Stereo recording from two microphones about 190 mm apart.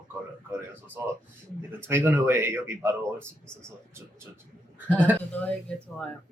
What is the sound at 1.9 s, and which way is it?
Speech, 10° right (ahead or behind).